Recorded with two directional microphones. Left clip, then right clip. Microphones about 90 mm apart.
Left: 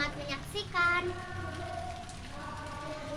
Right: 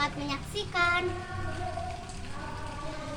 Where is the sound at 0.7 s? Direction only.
Centre (ahead or behind).